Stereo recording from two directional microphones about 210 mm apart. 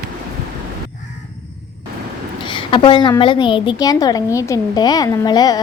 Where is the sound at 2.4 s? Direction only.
25° left (ahead or behind).